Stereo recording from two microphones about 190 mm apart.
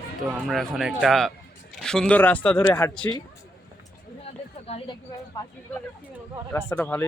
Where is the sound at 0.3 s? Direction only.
5° right (ahead or behind); by 2.9 s 15° left (ahead or behind).